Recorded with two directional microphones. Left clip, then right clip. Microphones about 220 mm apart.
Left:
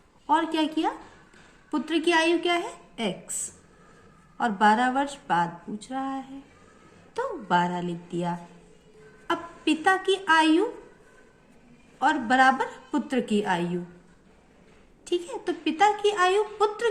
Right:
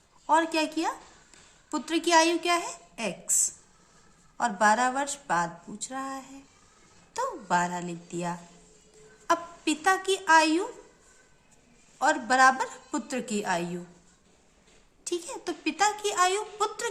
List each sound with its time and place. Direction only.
0.3 s a woman's voice: 45° right (ahead or behind)
4.4 s a woman's voice: 40° right (ahead or behind)
11.9 s a woman's voice: 45° right (ahead or behind)
15.0 s a woman's voice: 45° right (ahead or behind)